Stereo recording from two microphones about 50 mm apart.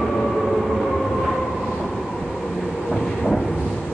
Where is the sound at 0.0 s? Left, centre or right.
Centre.